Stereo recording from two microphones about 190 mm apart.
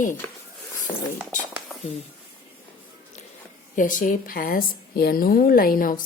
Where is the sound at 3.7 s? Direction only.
45° left (ahead or behind).